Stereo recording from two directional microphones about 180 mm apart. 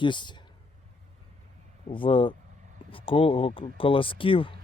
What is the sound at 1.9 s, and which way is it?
Speech, 30° left (ahead or behind).